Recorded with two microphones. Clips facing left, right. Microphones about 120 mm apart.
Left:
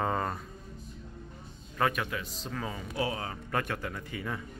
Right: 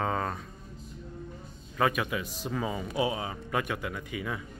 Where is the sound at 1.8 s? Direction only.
5° right (ahead or behind).